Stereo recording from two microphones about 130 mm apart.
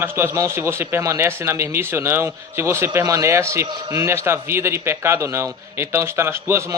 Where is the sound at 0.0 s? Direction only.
20° right (ahead or behind).